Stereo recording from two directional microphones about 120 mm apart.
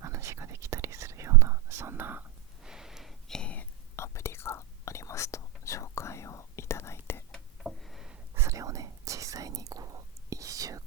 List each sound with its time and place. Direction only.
0.0 s whispering: 25° right (ahead or behind)
2.6 s whispering: 5° right (ahead or behind); by 7.3 s 20° left (ahead or behind)
7.3 s a sound: centre (ahead or behind)
8.4 s whispering: 25° right (ahead or behind)